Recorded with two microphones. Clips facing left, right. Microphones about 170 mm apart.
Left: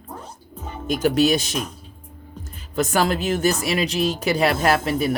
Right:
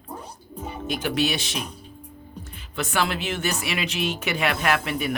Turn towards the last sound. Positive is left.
turn(degrees=35)  # may be behind; listen again after turning